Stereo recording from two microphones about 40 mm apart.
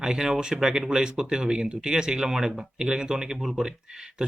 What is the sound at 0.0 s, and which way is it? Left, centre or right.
Speech, centre.